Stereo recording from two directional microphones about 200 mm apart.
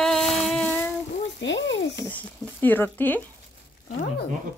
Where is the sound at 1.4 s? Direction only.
65° left (ahead or behind).